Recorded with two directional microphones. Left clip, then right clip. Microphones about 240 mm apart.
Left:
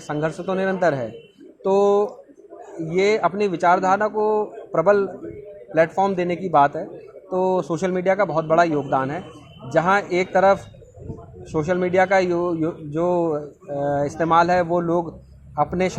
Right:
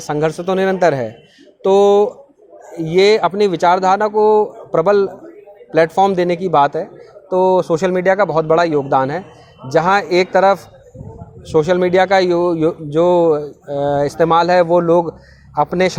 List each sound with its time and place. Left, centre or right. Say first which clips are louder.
0.0 s a man's voice: right 7 dB; right